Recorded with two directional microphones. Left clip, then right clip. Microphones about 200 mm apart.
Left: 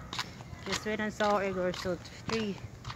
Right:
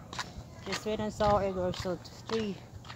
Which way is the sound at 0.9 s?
15° right (ahead or behind).